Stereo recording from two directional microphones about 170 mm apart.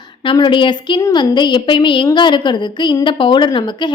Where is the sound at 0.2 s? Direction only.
30° left (ahead or behind).